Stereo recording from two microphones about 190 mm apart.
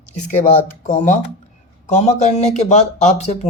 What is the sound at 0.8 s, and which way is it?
Speech, 40° left (ahead or behind).